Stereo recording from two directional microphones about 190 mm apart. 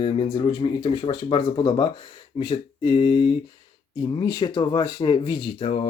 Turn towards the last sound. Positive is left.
turn(degrees=30)  # may be behind; listen again after turning